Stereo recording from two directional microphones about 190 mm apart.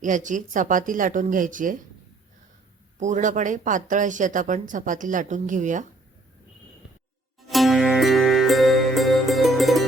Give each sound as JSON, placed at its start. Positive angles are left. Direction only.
{"t": 0.0, "sound": "speech", "side_deg": -40}
{"t": 3.0, "sound": "speech", "side_deg": -40}
{"t": 7.4, "sound": "music", "side_deg": 0}